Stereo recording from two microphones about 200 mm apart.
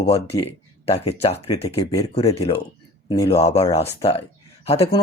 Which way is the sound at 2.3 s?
30° left (ahead or behind).